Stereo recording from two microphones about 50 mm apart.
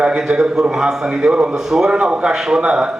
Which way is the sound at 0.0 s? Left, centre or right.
Centre.